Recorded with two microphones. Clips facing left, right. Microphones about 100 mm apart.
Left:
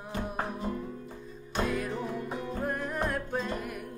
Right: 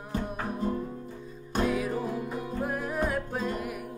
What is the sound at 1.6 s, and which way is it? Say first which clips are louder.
Music: right 3 dB; centre (ahead or behind).